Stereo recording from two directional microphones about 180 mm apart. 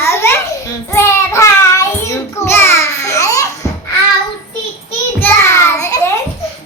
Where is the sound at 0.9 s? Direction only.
15° left (ahead or behind).